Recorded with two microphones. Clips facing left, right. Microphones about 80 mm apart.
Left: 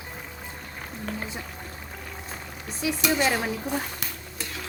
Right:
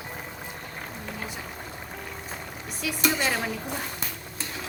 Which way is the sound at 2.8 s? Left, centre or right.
Centre.